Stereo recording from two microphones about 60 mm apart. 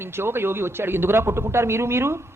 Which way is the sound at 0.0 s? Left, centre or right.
Right.